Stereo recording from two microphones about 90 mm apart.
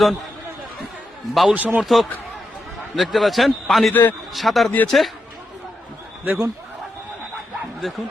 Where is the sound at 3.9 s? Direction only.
20° left (ahead or behind).